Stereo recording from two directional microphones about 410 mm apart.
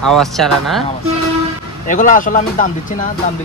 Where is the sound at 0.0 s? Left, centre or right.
Centre.